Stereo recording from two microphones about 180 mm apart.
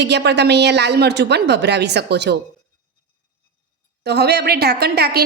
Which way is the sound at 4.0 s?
65° right (ahead or behind).